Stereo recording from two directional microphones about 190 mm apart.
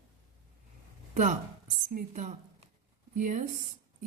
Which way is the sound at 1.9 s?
40° right (ahead or behind).